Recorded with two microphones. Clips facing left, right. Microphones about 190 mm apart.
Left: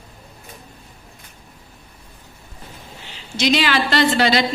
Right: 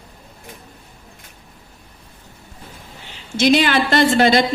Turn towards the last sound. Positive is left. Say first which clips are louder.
# right 3 dB
turn(degrees=-50)  # may be behind; listen again after turning